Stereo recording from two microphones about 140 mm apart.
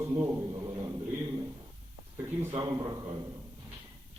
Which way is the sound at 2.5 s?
25° right (ahead or behind).